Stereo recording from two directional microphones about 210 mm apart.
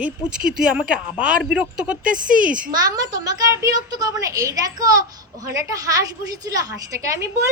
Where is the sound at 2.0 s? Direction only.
40° right (ahead or behind).